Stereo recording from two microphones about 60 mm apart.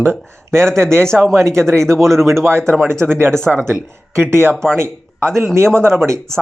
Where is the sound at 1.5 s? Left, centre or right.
Right.